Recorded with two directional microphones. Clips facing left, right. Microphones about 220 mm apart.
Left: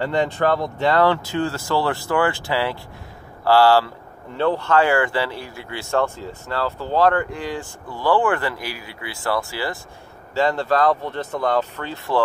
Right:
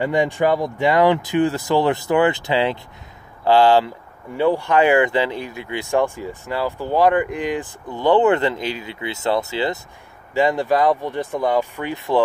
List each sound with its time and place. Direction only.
0.0 s speech: 15° right (ahead or behind)